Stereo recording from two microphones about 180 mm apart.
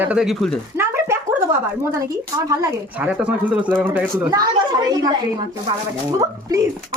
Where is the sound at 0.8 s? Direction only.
15° right (ahead or behind).